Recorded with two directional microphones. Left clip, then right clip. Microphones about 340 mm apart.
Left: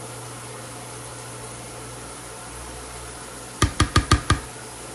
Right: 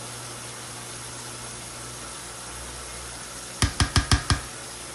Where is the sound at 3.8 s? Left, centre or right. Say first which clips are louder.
Left 4 dB; centre.